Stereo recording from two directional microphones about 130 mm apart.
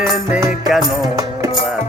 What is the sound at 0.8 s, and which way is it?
Music, 30° right (ahead or behind).